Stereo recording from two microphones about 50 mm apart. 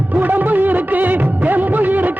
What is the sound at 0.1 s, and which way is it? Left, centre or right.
Music of bollywood, right.